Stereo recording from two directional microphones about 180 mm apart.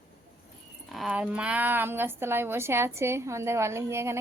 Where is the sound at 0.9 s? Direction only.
5° right (ahead or behind).